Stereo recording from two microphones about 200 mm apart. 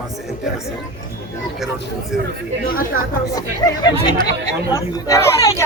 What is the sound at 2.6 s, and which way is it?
Speech, 45° left (ahead or behind).